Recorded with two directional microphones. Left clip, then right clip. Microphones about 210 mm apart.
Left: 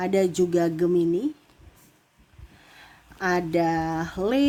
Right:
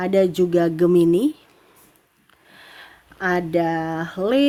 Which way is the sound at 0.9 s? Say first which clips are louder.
Right 7 dB; 35° right (ahead or behind).